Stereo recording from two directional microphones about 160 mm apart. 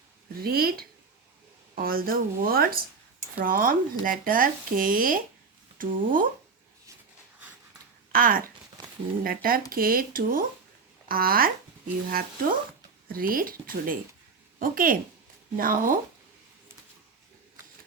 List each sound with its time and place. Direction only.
0.3 s speech: 70° right (ahead or behind)
8.1 s speech: 60° right (ahead or behind)